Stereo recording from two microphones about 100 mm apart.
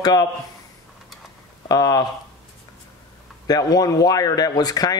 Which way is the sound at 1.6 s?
40° left (ahead or behind).